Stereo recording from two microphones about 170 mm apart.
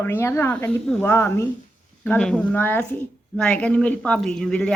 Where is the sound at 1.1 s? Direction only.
15° left (ahead or behind).